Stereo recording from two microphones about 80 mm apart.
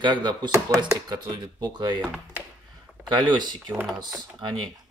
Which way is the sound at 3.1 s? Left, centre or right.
Right.